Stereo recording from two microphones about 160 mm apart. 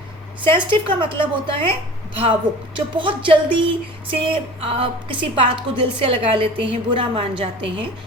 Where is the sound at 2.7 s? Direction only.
30° right (ahead or behind).